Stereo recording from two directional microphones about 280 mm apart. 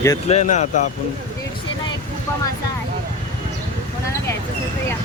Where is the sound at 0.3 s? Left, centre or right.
Left.